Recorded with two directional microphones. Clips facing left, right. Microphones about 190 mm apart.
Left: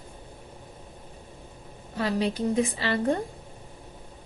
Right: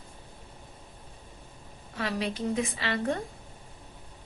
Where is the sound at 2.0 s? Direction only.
35° left (ahead or behind).